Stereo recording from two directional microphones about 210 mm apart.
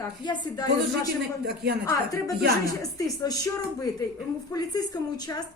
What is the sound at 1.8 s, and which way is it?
Speech, 15° left (ahead or behind).